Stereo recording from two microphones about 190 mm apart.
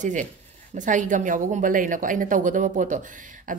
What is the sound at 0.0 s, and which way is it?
Speech, 40° right (ahead or behind).